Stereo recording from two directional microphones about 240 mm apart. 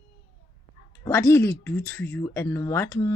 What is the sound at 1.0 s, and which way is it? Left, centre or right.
Speech, centre.